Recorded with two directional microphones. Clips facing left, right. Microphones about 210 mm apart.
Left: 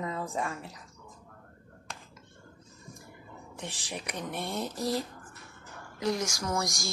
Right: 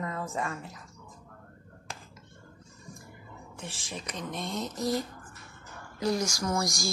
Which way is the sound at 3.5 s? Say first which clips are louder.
Left 1 dB; 15° left (ahead or behind).